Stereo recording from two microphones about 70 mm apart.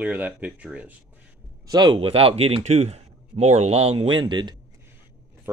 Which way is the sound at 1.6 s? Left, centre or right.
Right.